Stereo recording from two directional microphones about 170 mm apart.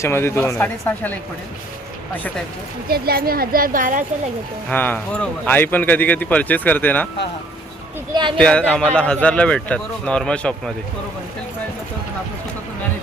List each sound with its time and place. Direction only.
0.0 s speech: 15° left (ahead or behind)
2.9 s speech: 65° right (ahead or behind)
4.7 s speech: 10° left (ahead or behind)
8.4 s speech: 5° left (ahead or behind)